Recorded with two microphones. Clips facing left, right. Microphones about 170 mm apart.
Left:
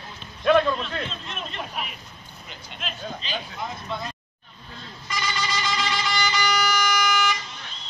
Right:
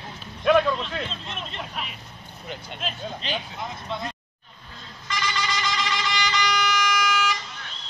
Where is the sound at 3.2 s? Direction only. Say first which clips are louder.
Right 3 dB; 65° right (ahead or behind).